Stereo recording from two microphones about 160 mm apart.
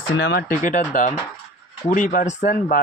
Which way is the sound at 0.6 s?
50° left (ahead or behind).